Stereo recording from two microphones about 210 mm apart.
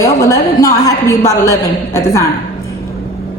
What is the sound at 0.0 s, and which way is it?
A woman's voice, 15° left (ahead or behind).